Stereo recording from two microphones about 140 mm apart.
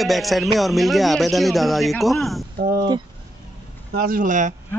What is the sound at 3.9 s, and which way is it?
Speech, 90° right.